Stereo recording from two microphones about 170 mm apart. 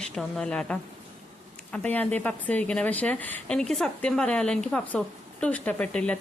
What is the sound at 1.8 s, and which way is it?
Speech, 10° left (ahead or behind).